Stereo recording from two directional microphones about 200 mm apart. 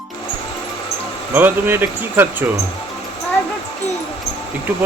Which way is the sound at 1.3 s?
10° right (ahead or behind).